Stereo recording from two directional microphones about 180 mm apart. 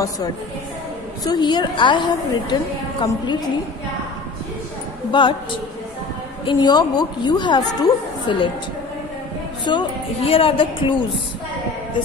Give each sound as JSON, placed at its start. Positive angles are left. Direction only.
{"t": 1.2, "sound": "a woman's voice", "side_deg": 25}
{"t": 5.1, "sound": "a woman's voice", "side_deg": 25}
{"t": 6.4, "sound": "a woman's voice", "side_deg": 25}
{"t": 9.7, "sound": "a woman's voice", "side_deg": 30}